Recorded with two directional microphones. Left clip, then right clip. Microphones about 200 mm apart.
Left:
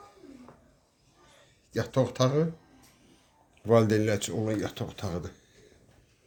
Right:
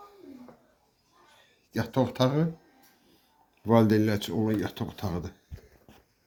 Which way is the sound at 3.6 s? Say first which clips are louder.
Even; 10° left (ahead or behind).